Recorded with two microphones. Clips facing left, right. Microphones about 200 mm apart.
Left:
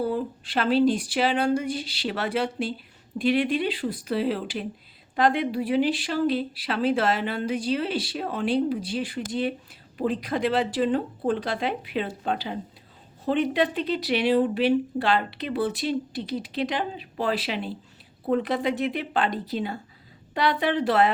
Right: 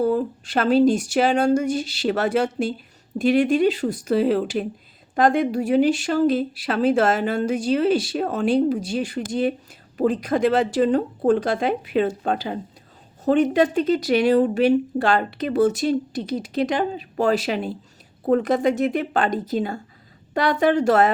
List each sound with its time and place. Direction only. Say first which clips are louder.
0.0 s speech: right 6 dB; 45° right (ahead or behind)